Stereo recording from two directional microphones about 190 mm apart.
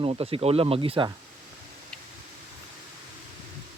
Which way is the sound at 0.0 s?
30° right (ahead or behind).